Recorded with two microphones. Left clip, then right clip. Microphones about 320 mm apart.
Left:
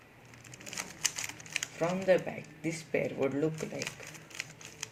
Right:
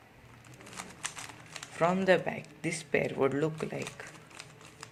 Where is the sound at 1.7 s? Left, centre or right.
Right.